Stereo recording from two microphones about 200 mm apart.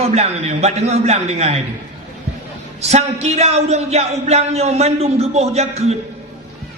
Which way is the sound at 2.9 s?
35° right (ahead or behind).